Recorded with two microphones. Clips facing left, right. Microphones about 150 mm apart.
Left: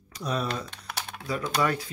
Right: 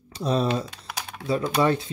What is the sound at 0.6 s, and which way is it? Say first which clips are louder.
Typing: right 2 dB; 10° right (ahead or behind).